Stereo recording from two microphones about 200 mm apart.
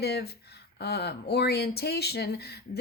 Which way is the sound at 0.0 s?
55° left (ahead or behind).